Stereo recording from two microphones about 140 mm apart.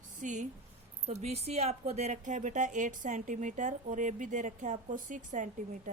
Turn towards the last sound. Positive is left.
turn(degrees=-60)  # may be behind; listen again after turning